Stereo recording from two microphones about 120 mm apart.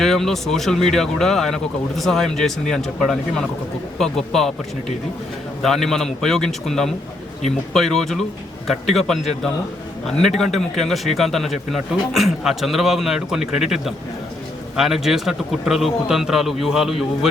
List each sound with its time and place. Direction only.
0.0 s a man's voice: 5° left (ahead or behind)
5.6 s a man's voice: centre (ahead or behind)
10.2 s a man's voice: centre (ahead or behind)